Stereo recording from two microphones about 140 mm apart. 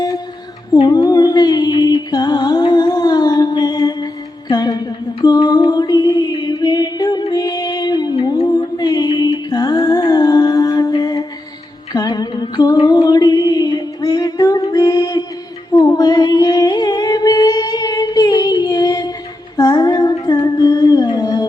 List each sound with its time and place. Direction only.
0.7 s a sound: 30° left (ahead or behind)
5.2 s music: 30° left (ahead or behind)
8.4 s mantra: 25° left (ahead or behind)
9.5 s music: 30° left (ahead or behind)
11.9 s a sound: 30° left (ahead or behind)
15.7 s humming: 25° left (ahead or behind)
19.5 s female singing: 30° left (ahead or behind)
20.2 s music: 25° left (ahead or behind)